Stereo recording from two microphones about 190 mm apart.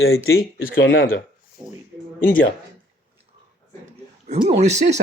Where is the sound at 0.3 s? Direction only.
90° left; by 1.2 s 75° left (ahead or behind).